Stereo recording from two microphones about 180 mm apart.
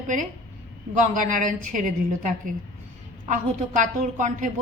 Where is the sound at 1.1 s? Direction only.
45° right (ahead or behind).